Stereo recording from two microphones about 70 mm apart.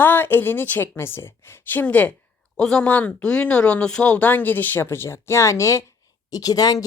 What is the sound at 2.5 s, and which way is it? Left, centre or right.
Speech, centre.